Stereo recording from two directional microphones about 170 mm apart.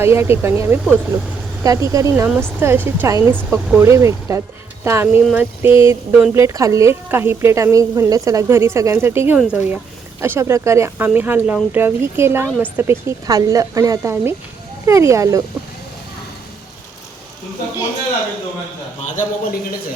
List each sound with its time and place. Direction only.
0.0 s speech: 15° right (ahead or behind)
19.0 s a man's voice: 50° left (ahead or behind)